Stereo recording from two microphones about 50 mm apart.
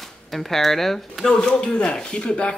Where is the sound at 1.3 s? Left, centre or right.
Centre.